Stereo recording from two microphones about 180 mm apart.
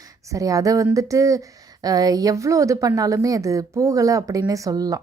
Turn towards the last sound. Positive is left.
turn(degrees=-20)  # may be behind; listen again after turning